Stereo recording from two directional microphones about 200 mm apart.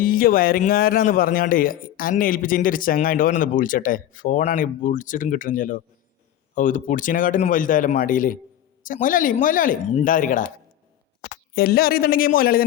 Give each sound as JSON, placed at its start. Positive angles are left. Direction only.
{"t": 0.0, "sound": "speech", "side_deg": 45}
{"t": 11.5, "sound": "speech", "side_deg": 50}